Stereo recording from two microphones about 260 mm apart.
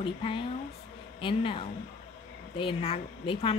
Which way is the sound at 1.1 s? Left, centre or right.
Centre.